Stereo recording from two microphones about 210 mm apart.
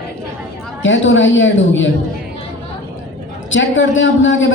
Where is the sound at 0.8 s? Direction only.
65° left (ahead or behind).